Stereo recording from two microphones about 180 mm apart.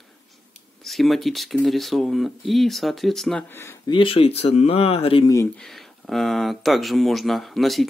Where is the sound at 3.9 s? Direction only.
30° left (ahead or behind).